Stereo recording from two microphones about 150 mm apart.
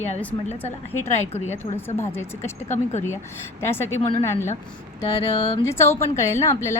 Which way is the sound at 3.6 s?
15° left (ahead or behind).